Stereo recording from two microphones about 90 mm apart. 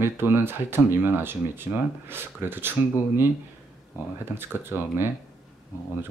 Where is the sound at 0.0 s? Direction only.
25° right (ahead or behind).